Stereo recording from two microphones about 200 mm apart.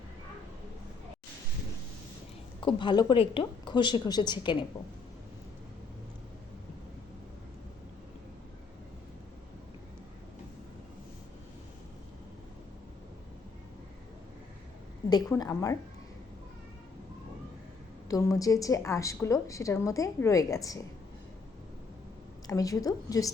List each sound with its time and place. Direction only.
2.6 s a woman's voice: 25° left (ahead or behind)
15.1 s a woman's voice: 15° left (ahead or behind)
18.1 s a woman's voice: 15° left (ahead or behind)
22.4 s a woman's voice: 15° left (ahead or behind)